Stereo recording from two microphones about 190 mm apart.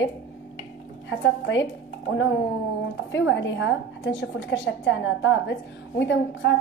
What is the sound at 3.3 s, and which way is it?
A woman's voice, 75° left (ahead or behind).